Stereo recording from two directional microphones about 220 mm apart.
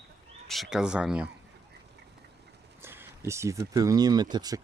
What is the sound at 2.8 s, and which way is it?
Speech, 10° right (ahead or behind).